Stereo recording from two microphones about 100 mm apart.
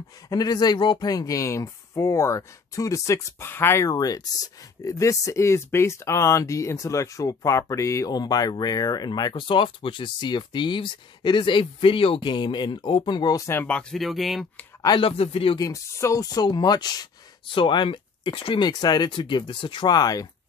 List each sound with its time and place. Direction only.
0.3 s speech: 40° left (ahead or behind); by 3.9 s 25° left (ahead or behind)
3.9 s speech: 35° left (ahead or behind)
13.7 s speech: 10° left (ahead or behind)
13.9 s speech: centre (ahead or behind)
15.0 s speech: 70° left (ahead or behind)
15.5 s speech: 35° left (ahead or behind)
17.5 s speech: 60° left (ahead or behind); by 20.2 s 40° left (ahead or behind)